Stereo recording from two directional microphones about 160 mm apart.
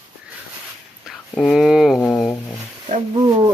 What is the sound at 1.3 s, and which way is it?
Speech, 5° left (ahead or behind).